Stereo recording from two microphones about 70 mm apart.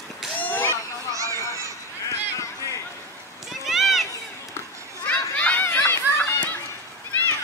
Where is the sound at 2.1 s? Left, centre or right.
Left.